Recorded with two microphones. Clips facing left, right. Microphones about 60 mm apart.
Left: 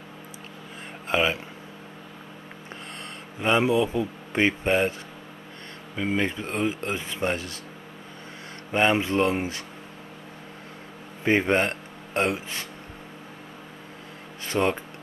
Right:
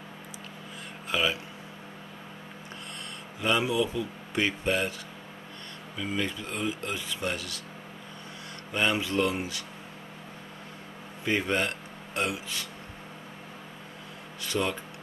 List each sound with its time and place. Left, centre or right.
1.0 s speech: left
3.3 s speech: left
5.9 s speech: left
8.7 s speech: left
11.2 s speech: left
14.4 s speech: left